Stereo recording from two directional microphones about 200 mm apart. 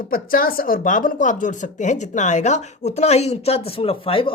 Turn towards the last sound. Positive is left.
turn(degrees=25)  # may be behind; listen again after turning